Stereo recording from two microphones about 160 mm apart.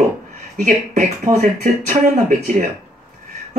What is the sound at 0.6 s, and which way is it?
Speech, 45° right (ahead or behind).